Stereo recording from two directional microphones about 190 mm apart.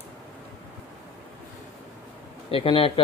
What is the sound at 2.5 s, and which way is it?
Speech, 30° left (ahead or behind).